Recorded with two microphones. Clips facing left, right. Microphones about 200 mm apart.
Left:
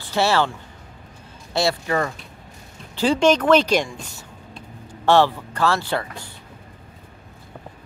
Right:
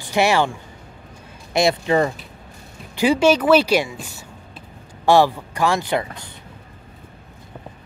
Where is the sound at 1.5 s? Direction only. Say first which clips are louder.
Right 4 dB; 20° right (ahead or behind).